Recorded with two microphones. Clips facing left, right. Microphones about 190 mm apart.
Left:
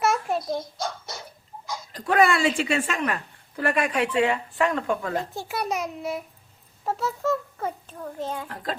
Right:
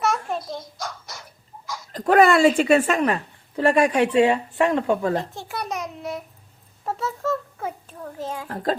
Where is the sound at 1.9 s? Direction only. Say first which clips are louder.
Right 5 dB; 50° right (ahead or behind).